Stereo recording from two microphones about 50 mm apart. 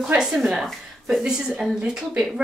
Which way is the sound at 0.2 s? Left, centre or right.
Centre.